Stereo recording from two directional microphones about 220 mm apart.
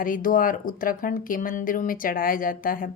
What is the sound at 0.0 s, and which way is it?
Speech, 40° left (ahead or behind).